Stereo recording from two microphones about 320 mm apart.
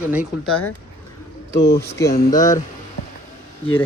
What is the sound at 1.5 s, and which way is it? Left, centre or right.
Speech, left.